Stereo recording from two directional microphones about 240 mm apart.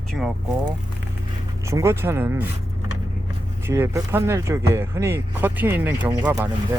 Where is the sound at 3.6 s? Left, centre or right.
Centre.